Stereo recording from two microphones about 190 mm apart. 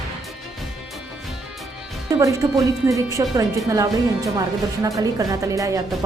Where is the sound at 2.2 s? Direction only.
15° right (ahead or behind).